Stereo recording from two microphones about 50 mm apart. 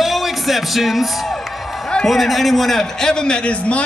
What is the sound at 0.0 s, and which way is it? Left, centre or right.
Music, centre.